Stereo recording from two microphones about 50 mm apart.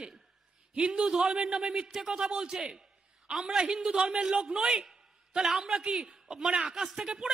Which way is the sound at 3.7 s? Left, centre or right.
Centre.